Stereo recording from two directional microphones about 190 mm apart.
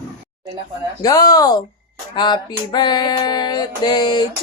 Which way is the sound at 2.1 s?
25° left (ahead or behind).